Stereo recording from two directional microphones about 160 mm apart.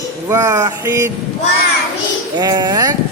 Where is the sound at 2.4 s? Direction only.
25° right (ahead or behind).